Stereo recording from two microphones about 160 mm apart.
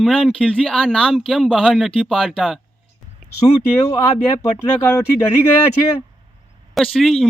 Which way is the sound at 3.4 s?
20° left (ahead or behind).